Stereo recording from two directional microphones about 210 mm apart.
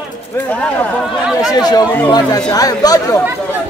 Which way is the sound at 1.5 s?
20° left (ahead or behind).